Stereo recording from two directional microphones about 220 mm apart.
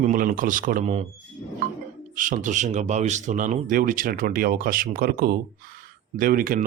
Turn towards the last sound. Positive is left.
turn(degrees=-40)  # may be behind; listen again after turning